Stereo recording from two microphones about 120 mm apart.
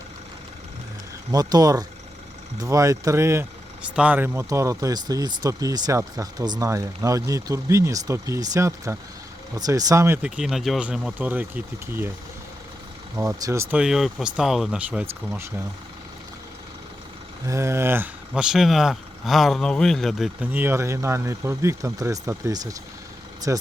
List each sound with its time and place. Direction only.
1.3 s speech: 30° right (ahead or behind)
3.9 s speech: 10° right (ahead or behind)
10.2 s speech: 5° right (ahead or behind)
13.1 s speech: 25° right (ahead or behind)
13.7 s speech: 5° right (ahead or behind)
17.4 s speech: 25° right (ahead or behind)
18.3 s speech: 5° right (ahead or behind)
20.5 s speech: 20° right (ahead or behind)